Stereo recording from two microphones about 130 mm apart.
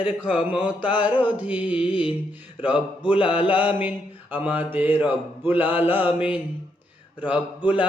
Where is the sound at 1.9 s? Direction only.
40° left (ahead or behind).